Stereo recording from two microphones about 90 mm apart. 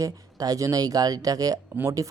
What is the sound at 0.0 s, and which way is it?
Speech, 40° right (ahead or behind).